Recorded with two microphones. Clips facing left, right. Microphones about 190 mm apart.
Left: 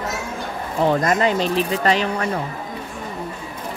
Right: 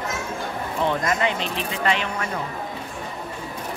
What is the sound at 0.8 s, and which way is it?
Speech, 40° left (ahead or behind).